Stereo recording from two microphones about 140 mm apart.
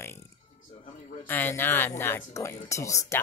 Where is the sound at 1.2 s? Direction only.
15° left (ahead or behind).